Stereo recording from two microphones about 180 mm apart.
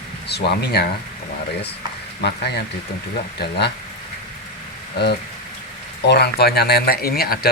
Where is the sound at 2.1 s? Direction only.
70° left (ahead or behind).